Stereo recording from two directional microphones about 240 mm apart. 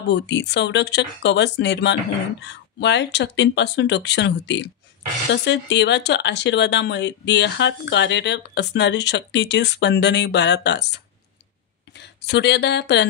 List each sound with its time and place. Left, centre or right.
0.1 s speech: left